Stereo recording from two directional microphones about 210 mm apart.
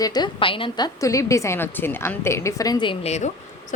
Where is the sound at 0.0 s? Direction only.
20° left (ahead or behind).